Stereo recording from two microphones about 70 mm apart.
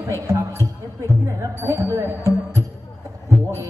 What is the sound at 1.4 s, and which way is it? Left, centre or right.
Music, right.